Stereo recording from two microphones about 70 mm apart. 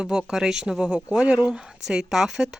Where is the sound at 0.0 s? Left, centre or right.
Centre.